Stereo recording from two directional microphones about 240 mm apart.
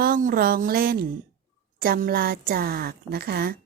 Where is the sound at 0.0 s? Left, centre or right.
Right.